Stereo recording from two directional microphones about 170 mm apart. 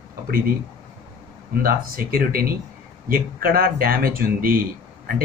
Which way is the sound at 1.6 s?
60° right (ahead or behind).